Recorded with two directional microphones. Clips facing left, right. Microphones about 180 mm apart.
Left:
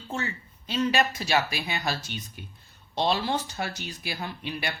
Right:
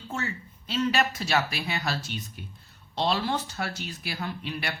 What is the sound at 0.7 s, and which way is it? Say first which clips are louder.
A woman's voice: left 1 dB; 15° left (ahead or behind).